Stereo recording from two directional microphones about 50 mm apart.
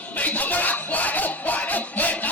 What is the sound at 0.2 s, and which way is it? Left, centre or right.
Music, left.